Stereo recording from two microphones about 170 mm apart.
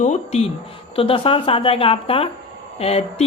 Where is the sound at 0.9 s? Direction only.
30° left (ahead or behind).